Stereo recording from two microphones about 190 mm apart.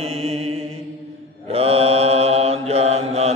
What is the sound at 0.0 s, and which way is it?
Mantra, 35° right (ahead or behind).